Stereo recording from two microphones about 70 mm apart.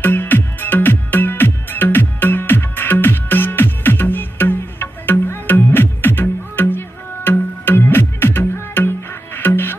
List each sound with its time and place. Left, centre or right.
0.0 s music: left